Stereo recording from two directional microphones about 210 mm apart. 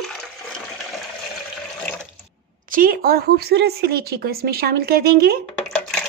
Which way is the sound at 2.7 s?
40° right (ahead or behind).